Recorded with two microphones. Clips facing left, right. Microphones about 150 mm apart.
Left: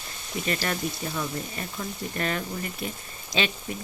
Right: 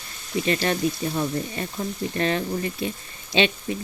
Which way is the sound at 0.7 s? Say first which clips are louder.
Right 6 dB; 35° right (ahead or behind).